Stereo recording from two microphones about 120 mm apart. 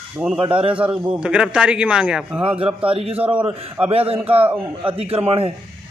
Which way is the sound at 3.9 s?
50° right (ahead or behind).